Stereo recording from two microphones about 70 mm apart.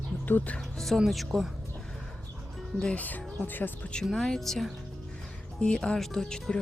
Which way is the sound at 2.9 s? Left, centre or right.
Left.